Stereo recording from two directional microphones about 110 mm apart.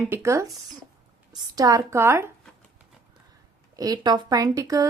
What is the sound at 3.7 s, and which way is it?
Speech, 35° right (ahead or behind).